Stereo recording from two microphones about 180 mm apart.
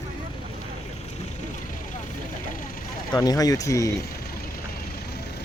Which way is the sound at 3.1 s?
20° left (ahead or behind).